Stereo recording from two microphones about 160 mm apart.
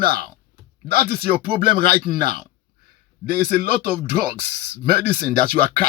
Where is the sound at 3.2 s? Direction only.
70° right (ahead or behind).